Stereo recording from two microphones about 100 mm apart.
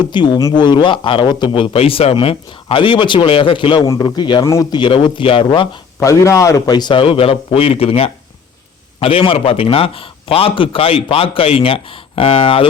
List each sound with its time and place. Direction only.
0.0 s a man's voice: 50° left (ahead or behind)
4.4 s speech: 30° left (ahead or behind)
4.7 s a man's voice: 55° left (ahead or behind)
6.0 s speech: 30° left (ahead or behind)
6.7 s speech: 50° left (ahead or behind); by 8.1 s 85° left
9.0 s a man's voice: 65° left (ahead or behind)